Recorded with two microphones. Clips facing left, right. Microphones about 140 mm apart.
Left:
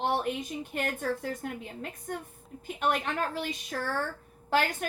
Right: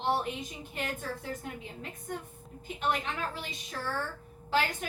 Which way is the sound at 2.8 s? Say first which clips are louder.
Left 3 dB; 55° left (ahead or behind).